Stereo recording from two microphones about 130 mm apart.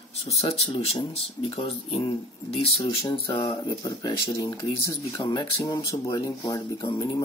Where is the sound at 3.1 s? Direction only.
40° left (ahead or behind).